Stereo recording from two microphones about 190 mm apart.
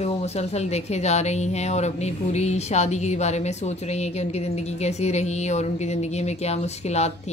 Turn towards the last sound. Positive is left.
turn(degrees=35)  # may be behind; listen again after turning